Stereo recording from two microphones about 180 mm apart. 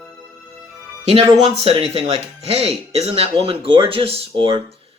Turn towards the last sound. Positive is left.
turn(degrees=-30)  # may be behind; listen again after turning